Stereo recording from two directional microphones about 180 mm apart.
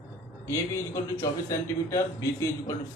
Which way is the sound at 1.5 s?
15° left (ahead or behind).